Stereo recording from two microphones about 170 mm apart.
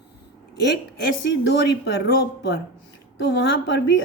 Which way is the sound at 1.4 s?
90° left.